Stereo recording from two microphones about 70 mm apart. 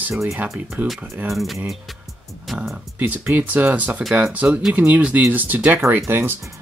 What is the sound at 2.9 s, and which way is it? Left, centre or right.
Speech, right.